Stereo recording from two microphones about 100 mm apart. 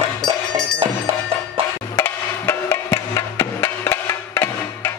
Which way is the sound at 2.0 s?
25° left (ahead or behind).